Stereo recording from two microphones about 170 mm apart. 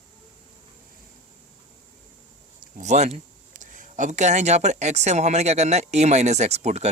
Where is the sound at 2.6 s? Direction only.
45° right (ahead or behind).